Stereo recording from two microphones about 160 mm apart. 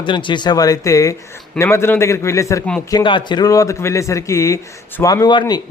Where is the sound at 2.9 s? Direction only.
30° left (ahead or behind).